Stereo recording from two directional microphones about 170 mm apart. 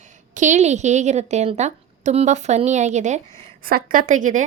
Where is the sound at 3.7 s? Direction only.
55° right (ahead or behind).